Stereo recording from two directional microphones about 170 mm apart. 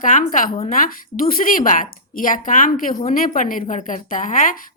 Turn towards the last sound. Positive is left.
turn(degrees=50)  # may be behind; listen again after turning